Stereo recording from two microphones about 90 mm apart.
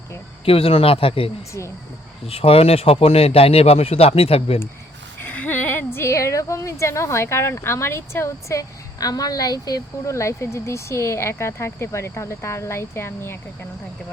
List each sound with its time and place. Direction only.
0.4 s a man's voice: 90° left
5.2 s a woman's voice: 20° left (ahead or behind)